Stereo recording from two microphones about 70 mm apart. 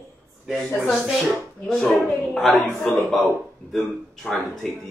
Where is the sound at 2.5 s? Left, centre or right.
Left.